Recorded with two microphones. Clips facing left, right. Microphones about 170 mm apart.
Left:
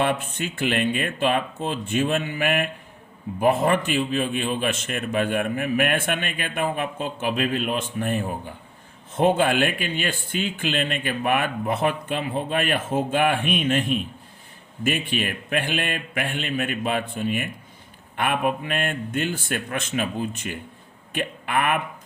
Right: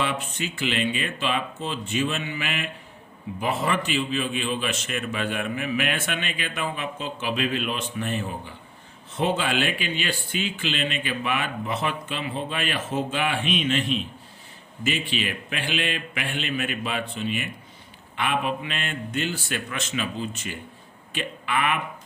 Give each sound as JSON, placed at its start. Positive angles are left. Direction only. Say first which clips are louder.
{"t": 0.0, "sound": "a man's voice", "louder": "left 4 dB", "side_deg": 55}